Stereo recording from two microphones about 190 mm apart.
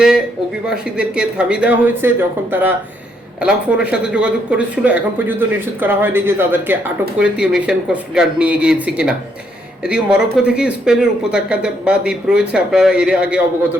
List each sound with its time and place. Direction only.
0.7 s speech: 5° right (ahead or behind)